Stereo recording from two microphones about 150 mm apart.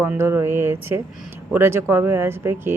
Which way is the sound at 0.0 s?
15° right (ahead or behind).